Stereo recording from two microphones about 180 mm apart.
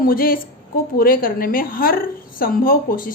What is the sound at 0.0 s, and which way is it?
A woman's voice, 55° left (ahead or behind).